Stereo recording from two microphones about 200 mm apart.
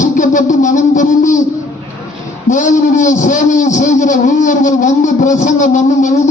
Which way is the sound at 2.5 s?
40° left (ahead or behind).